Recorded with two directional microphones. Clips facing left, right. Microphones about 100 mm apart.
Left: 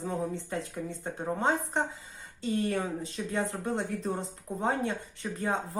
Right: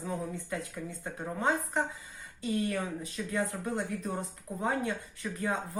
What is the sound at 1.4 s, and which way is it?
Speech, 25° left (ahead or behind).